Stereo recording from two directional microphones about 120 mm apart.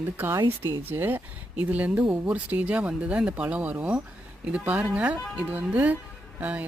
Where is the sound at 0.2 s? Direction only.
20° right (ahead or behind).